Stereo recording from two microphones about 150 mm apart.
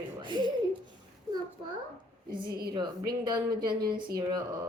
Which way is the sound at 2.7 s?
25° right (ahead or behind).